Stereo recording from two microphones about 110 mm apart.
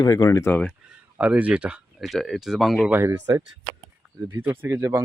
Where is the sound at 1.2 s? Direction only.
10° right (ahead or behind).